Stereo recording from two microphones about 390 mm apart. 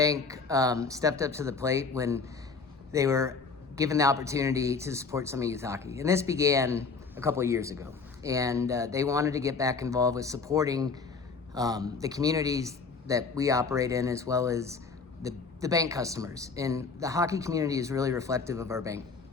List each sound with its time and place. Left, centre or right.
0.0 s speech: centre